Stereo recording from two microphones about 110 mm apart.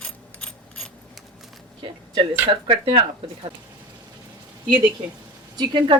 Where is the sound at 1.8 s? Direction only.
50° right (ahead or behind).